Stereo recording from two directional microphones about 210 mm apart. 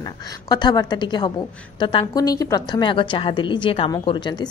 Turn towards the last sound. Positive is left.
turn(degrees=20)  # may be behind; listen again after turning